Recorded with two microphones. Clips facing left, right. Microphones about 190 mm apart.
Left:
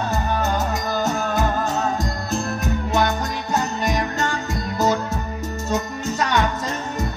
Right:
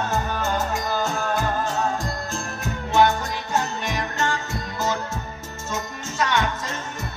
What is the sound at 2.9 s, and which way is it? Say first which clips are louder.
Music: right 4 dB; 40° left (ahead or behind).